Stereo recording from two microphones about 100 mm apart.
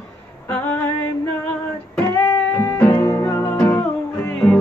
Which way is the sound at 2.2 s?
30° left (ahead or behind).